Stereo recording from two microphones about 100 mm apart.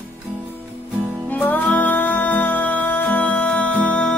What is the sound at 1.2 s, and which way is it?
Music, 15° left (ahead or behind).